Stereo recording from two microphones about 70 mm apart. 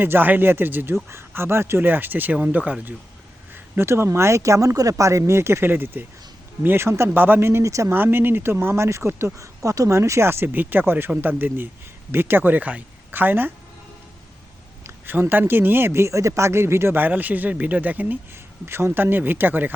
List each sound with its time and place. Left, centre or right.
0.0 s a man's voice: right
3.5 s speech: right
7.9 s speech: right
9.6 s a man's voice: right
14.8 s a man's voice: right
18.6 s a man's voice: right